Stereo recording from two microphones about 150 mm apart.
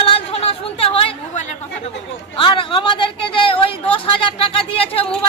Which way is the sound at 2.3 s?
35° left (ahead or behind).